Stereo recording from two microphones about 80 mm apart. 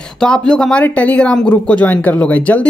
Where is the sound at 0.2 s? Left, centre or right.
Centre.